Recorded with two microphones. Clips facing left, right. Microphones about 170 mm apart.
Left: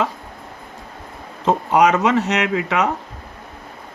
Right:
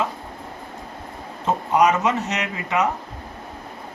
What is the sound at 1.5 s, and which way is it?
Speech, 90° left.